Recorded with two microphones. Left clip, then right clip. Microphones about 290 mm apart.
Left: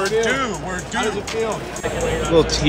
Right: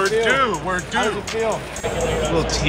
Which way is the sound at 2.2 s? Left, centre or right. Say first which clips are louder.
Left 8 dB; centre.